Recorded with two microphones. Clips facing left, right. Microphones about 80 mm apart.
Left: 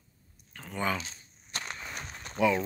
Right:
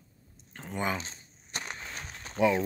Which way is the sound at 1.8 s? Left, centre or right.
Centre.